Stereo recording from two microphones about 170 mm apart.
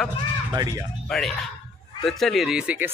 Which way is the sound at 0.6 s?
20° right (ahead or behind).